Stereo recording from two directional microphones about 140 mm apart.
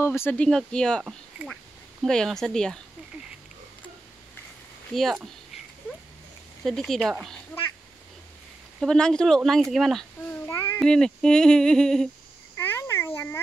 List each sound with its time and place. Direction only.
0.0 s speech: 20° left (ahead or behind)
2.0 s speech: 5° left (ahead or behind)
4.9 s speech: centre (ahead or behind)
6.6 s speech: 5° left (ahead or behind)
8.7 s speech: 5° left (ahead or behind)
10.4 s a sound: 20° left (ahead or behind)
10.8 s speech: 5° left (ahead or behind)
12.5 s a sound: 20° left (ahead or behind)